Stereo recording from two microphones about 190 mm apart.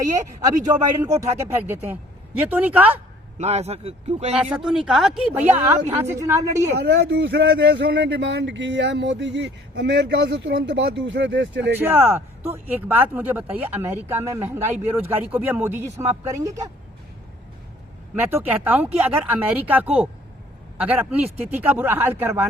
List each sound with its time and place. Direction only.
1.2 s speech: 10° right (ahead or behind)
3.3 s a man's voice: 35° right (ahead or behind)
4.4 s speech: 5° right (ahead or behind)
6.7 s speech: 60° right (ahead or behind)
11.8 s speech: 10° right (ahead or behind)
18.1 s speech: 10° right (ahead or behind)